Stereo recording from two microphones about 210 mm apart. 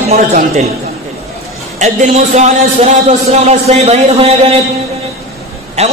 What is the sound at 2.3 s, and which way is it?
A man's voice, 35° right (ahead or behind).